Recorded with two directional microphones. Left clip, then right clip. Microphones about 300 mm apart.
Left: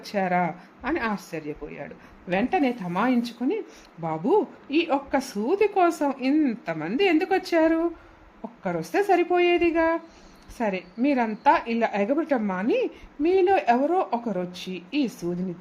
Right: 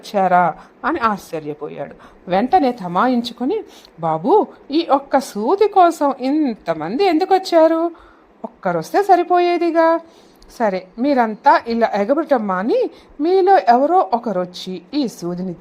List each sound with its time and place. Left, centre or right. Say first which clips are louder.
0.1 s a woman's voice: right 10 dB; right